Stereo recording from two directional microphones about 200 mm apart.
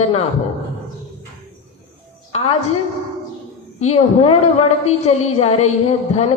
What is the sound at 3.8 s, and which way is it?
A woman's voice, 30° left (ahead or behind).